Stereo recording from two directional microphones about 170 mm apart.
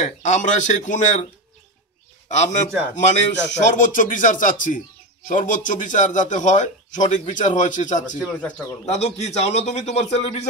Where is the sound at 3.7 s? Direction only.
50° left (ahead or behind).